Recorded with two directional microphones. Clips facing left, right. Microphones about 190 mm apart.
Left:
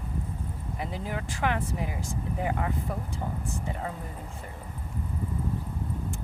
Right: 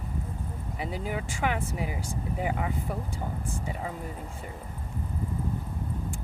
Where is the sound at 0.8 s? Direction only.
5° right (ahead or behind).